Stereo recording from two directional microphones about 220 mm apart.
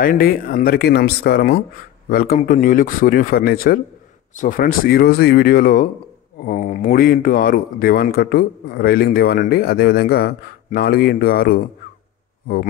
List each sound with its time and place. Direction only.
0.0 s a man's voice: 40° left (ahead or behind)